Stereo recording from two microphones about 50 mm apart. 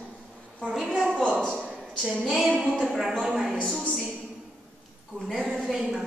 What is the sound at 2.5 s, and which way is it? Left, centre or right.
Speech, centre.